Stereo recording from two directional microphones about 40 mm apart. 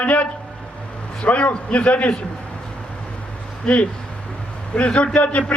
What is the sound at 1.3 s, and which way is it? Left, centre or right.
Speech, left.